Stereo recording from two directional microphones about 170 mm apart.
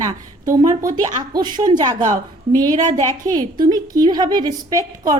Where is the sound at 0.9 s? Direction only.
25° right (ahead or behind).